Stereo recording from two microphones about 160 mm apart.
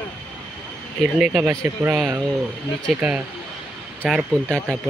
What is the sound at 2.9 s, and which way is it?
Speech, 5° right (ahead or behind).